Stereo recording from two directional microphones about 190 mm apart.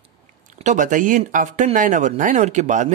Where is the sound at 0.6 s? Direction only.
40° right (ahead or behind).